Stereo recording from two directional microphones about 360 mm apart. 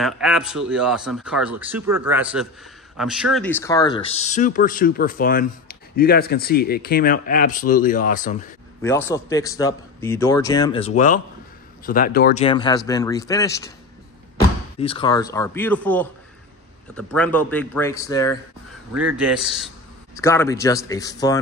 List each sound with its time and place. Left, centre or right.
0.0 s speech: centre; by 8.5 s left
8.8 s speech: centre; by 12.4 s left
12.4 s speech: centre
14.8 s speech: centre
18.9 s speech: centre